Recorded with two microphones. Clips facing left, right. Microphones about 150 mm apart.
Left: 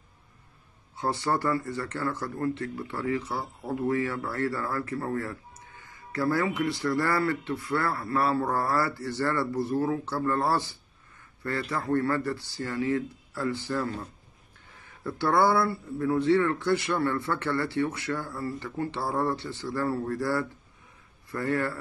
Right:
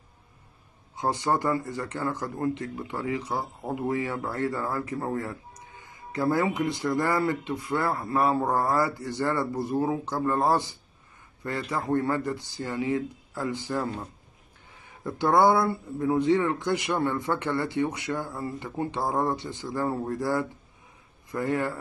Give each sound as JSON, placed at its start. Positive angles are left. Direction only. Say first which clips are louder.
{"t": 0.9, "sound": "speech", "louder": "right 2 dB", "side_deg": -15}